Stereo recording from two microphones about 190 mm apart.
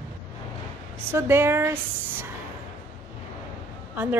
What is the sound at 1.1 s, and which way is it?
Speech, 15° right (ahead or behind).